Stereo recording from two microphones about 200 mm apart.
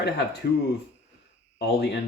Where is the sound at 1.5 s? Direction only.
55° left (ahead or behind).